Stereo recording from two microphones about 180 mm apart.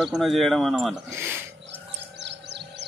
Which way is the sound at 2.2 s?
70° right (ahead or behind).